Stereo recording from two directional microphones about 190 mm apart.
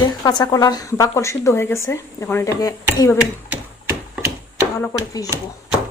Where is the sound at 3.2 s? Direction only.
5° right (ahead or behind).